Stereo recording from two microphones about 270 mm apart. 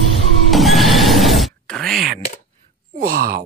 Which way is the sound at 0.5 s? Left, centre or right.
Centre.